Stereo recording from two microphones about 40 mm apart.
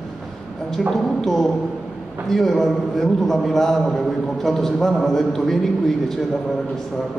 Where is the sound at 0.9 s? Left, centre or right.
Centre.